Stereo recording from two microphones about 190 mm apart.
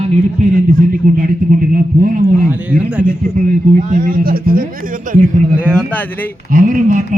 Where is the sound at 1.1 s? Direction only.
50° right (ahead or behind).